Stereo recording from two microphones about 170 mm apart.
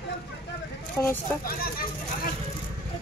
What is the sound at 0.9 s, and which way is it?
Speech, 10° left (ahead or behind).